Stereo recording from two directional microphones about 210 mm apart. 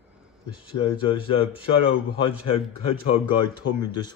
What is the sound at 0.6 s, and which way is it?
Speech, 25° left (ahead or behind).